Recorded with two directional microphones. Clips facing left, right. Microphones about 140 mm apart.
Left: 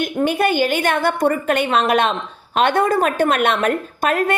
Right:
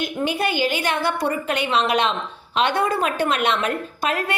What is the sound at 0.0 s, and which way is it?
A woman's voice, 50° left (ahead or behind).